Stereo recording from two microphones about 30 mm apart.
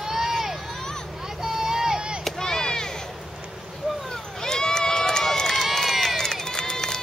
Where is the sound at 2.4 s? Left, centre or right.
Centre.